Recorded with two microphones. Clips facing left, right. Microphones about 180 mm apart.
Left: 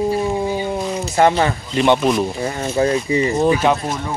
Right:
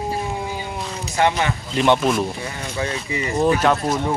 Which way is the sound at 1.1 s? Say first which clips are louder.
Left 4 dB; 35° left (ahead or behind).